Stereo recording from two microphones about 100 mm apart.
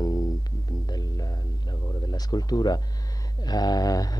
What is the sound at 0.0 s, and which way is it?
Music, 40° left (ahead or behind).